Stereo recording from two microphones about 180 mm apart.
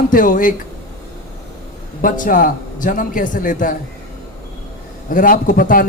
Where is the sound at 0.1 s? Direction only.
50° left (ahead or behind).